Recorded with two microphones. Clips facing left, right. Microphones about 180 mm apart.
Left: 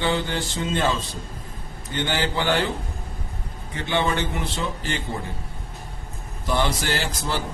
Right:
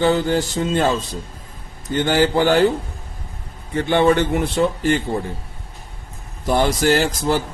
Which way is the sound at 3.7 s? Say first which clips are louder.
Right 9 dB; 50° right (ahead or behind).